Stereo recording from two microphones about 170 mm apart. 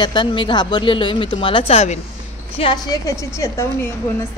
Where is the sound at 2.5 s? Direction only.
25° left (ahead or behind).